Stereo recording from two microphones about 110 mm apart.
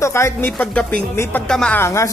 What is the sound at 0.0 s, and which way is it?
Speech, 25° left (ahead or behind).